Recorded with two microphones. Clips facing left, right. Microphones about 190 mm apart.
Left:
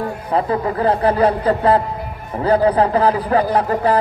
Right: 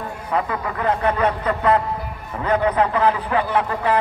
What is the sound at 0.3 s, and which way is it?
Speech, 35° left (ahead or behind).